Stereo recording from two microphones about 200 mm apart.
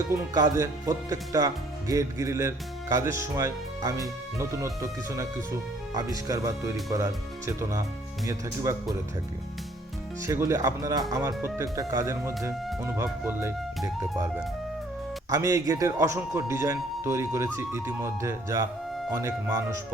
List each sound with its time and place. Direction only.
0.1 s speech: 15° right (ahead or behind)
10.2 s speech: 15° right (ahead or behind)
15.3 s speech: 15° right (ahead or behind)